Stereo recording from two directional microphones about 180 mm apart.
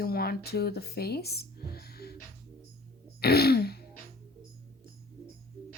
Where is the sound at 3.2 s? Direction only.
60° left (ahead or behind).